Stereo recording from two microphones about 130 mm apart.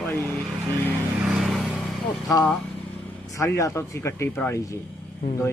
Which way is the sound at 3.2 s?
25° left (ahead or behind).